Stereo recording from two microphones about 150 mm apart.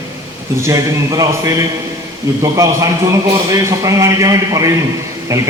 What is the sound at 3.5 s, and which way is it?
Speech, 20° right (ahead or behind).